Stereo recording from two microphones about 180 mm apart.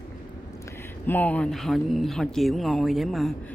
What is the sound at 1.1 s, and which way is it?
Speech, 10° left (ahead or behind).